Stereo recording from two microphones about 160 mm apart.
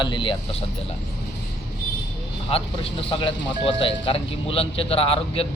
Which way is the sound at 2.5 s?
35° left (ahead or behind).